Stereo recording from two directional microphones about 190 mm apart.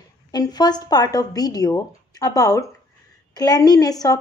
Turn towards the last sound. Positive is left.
turn(degrees=20)  # may be behind; listen again after turning